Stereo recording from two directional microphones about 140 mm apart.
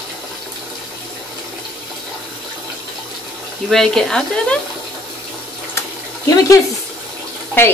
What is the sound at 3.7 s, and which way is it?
Speech, 5° left (ahead or behind).